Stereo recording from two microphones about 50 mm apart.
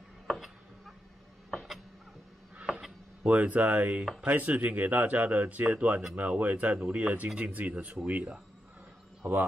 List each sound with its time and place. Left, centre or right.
3.3 s speech: right
9.2 s speech: right